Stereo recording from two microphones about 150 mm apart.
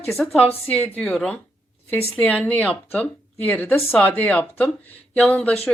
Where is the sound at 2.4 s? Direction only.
10° left (ahead or behind).